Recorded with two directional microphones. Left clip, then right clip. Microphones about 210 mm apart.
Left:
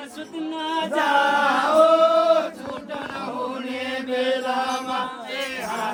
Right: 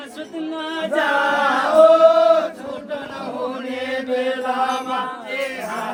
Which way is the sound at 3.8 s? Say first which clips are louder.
Right 2 dB; centre (ahead or behind).